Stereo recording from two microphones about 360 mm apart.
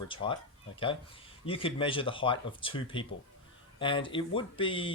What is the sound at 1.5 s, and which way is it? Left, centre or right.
A man's voice, centre.